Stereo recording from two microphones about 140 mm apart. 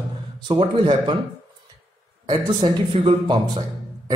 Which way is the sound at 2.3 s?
30° right (ahead or behind).